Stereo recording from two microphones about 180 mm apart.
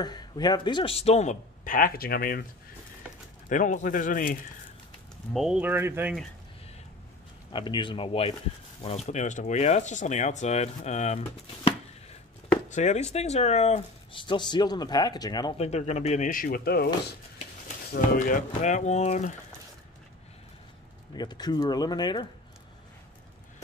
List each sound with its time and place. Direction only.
0.0 s speech: 20° left (ahead or behind); by 2.4 s 55° left (ahead or behind)
3.4 s speech: 45° left (ahead or behind)
5.3 s speech: 5° right (ahead or behind)
7.5 s speech: 25° left (ahead or behind)
15.5 s speech: 35° left (ahead or behind); by 16.9 s 60° left (ahead or behind)
18.1 s speech: 45° left (ahead or behind)
21.1 s speech: 25° left (ahead or behind)